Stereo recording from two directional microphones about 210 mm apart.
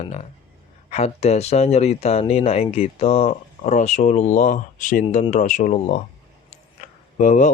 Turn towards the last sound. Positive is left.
turn(degrees=35)  # may be behind; listen again after turning